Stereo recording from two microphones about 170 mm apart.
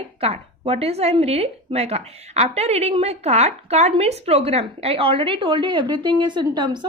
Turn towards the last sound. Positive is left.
turn(degrees=-25)  # may be behind; listen again after turning